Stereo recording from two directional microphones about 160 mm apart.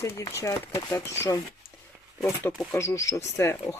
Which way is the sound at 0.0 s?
20° left (ahead or behind).